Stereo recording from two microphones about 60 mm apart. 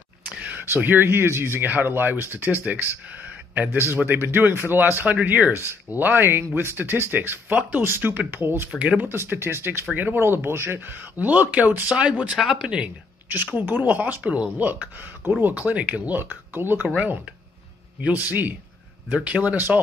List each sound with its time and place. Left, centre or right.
0.8 s speech: right
3.9 s speech: right
8.7 s speech: right
9.0 s speech: right; by 12.9 s centre
13.3 s speech: right
14.7 s speech: right
16.9 s speech: right